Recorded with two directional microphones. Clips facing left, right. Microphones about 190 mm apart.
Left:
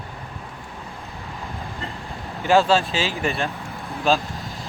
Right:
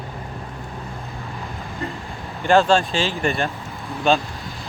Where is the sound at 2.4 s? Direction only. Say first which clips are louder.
Right 1 dB; 5° left (ahead or behind).